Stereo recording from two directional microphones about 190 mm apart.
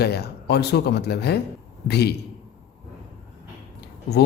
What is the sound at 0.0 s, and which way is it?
Speech, 60° left (ahead or behind).